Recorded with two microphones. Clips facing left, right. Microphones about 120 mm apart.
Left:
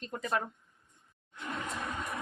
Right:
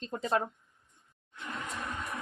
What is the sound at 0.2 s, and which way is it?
Speech, 30° right (ahead or behind).